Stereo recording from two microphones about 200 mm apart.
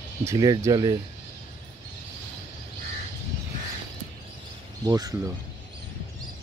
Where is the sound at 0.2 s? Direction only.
15° right (ahead or behind).